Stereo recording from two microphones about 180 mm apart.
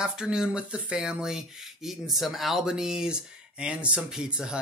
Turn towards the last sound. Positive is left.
turn(degrees=-5)  # may be behind; listen again after turning